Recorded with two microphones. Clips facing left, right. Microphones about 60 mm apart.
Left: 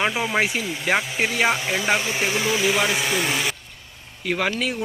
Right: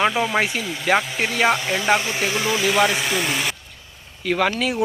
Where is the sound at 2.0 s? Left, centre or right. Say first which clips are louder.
Even; centre.